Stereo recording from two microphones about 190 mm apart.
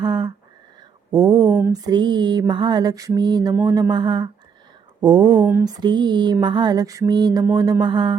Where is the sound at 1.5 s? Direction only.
5° right (ahead or behind).